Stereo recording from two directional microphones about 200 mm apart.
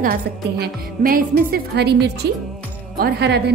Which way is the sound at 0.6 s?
50° right (ahead or behind).